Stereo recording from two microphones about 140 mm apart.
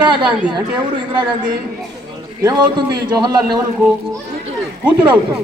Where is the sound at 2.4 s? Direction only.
25° right (ahead or behind).